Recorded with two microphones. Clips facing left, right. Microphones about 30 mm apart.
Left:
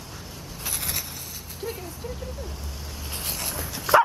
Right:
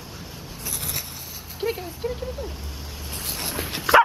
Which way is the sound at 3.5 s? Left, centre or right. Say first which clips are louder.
Right 4 dB; right.